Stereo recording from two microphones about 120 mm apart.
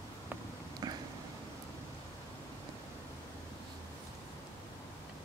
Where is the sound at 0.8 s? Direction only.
30° right (ahead or behind).